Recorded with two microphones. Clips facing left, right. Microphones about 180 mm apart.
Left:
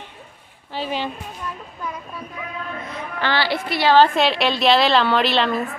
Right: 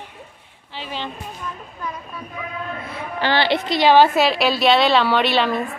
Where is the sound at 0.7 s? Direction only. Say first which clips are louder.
Left 7 dB; 45° left (ahead or behind).